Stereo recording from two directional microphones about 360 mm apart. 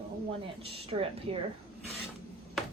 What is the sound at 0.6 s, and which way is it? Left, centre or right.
Speech, centre.